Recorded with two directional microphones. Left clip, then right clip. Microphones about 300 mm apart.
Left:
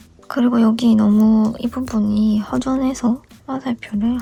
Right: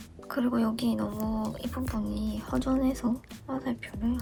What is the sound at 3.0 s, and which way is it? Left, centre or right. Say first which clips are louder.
Speech: left 11 dB; left.